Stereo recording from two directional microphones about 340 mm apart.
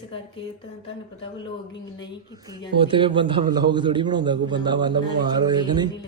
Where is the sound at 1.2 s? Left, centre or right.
Centre.